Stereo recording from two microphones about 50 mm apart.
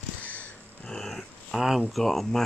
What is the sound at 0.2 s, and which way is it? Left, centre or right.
Crow, left.